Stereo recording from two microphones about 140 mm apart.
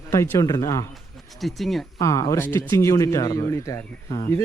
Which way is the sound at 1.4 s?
Centre (ahead or behind).